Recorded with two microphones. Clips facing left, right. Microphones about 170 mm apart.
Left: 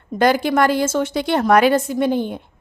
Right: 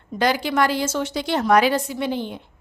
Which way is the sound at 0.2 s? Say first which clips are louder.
Left 4 dB; 50° left (ahead or behind).